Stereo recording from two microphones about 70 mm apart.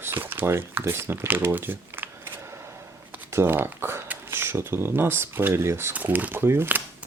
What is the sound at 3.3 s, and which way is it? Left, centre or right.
Speech, right.